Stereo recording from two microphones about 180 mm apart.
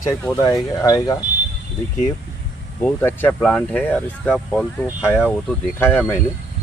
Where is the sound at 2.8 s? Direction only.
10° left (ahead or behind).